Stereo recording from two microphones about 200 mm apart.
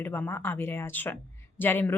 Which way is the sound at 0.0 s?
10° left (ahead or behind).